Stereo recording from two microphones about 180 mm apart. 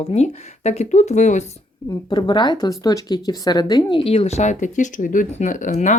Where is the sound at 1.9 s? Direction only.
25° left (ahead or behind); by 5.9 s 45° left (ahead or behind).